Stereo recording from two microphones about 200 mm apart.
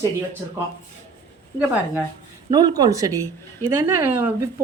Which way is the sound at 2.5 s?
20° right (ahead or behind).